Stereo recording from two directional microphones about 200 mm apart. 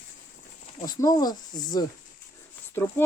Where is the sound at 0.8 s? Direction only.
20° left (ahead or behind).